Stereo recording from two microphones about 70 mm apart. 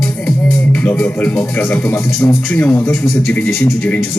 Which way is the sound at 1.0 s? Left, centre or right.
Left.